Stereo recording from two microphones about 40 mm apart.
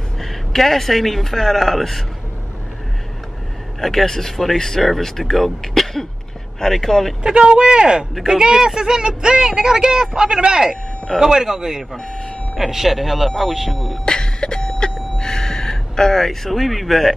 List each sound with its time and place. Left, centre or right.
0.2 s speech: centre
3.8 s speech: centre
7.3 s speech: right
12.0 s speech: centre
12.5 s speech: centre
14.0 s a sound: centre